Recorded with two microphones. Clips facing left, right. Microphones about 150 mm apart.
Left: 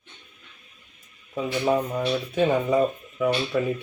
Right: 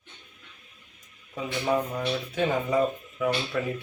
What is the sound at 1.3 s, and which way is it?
Speech, 25° left (ahead or behind).